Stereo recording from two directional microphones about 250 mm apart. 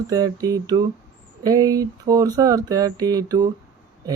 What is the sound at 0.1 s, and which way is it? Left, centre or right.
Speech, centre.